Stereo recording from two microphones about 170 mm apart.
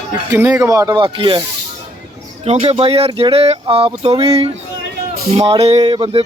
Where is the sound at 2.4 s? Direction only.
35° right (ahead or behind).